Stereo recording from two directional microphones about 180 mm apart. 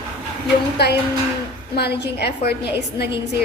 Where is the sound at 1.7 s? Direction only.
65° left (ahead or behind).